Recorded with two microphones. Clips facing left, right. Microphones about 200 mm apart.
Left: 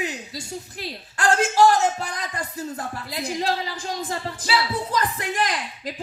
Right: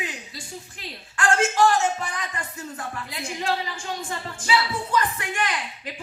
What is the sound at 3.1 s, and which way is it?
Speech, 35° left (ahead or behind).